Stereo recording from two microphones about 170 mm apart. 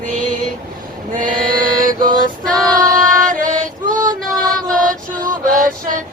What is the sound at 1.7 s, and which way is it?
Mantra, 55° right (ahead or behind).